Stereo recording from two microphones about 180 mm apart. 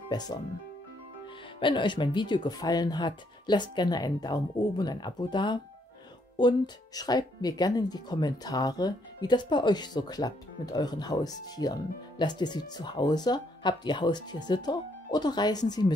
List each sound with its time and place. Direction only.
0.1 s speech: 25° left (ahead or behind)
1.6 s speech: 25° left (ahead or behind)